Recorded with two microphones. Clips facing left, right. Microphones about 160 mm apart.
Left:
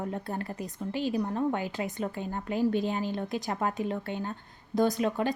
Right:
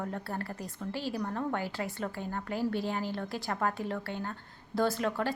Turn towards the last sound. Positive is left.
turn(degrees=20)  # may be behind; listen again after turning